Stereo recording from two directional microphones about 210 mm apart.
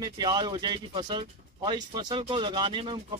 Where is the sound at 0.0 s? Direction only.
20° right (ahead or behind).